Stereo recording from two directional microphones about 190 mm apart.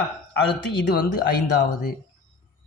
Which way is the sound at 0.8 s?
60° left (ahead or behind).